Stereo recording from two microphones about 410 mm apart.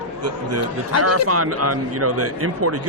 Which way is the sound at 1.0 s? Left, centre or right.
Right.